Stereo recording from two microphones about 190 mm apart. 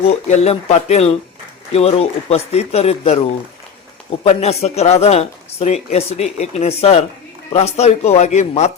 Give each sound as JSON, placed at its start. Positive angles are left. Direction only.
{"t": 0.3, "sound": "speech", "side_deg": 35}
{"t": 4.2, "sound": "speech", "side_deg": 35}